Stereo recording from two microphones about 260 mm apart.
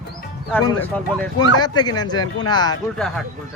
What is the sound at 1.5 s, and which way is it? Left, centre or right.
Speech, centre.